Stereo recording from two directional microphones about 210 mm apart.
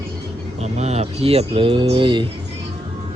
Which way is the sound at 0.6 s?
30° right (ahead or behind).